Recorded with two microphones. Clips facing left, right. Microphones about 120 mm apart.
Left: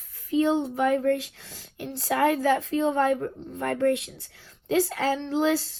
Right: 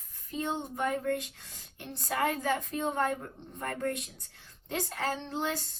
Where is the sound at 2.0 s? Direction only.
70° left (ahead or behind); by 5.2 s 90° left.